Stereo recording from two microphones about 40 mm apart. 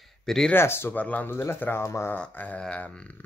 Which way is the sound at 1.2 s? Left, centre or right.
Left.